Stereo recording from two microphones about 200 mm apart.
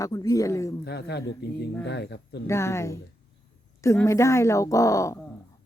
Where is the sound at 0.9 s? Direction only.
55° left (ahead or behind).